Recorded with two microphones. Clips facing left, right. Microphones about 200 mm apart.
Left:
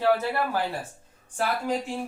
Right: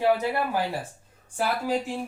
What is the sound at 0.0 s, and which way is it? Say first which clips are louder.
Speech: even; 15° right (ahead or behind).